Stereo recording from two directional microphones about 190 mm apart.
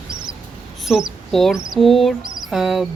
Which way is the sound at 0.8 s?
Centre (ahead or behind).